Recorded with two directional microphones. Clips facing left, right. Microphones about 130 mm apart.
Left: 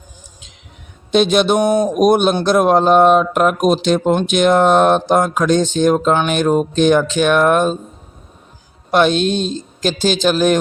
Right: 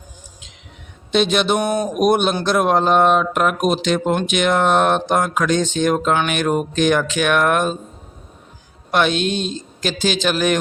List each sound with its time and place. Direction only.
1.1 s speech: 45° left (ahead or behind)
8.9 s speech: 35° left (ahead or behind)